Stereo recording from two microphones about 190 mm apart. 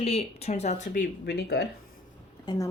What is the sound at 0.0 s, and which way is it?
Speech, 30° left (ahead or behind).